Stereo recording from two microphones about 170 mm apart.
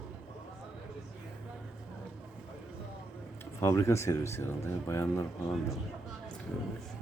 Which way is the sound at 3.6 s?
15° left (ahead or behind).